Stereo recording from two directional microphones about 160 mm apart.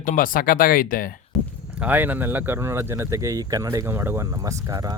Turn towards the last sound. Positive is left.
turn(degrees=-15)  # may be behind; listen again after turning